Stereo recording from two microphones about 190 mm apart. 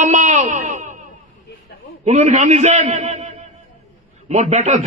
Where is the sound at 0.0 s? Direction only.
40° right (ahead or behind).